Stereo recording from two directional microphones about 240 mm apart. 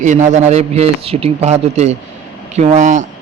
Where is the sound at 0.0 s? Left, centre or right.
Right.